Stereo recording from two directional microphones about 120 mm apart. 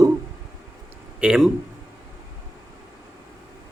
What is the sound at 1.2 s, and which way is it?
Speech, 5° right (ahead or behind).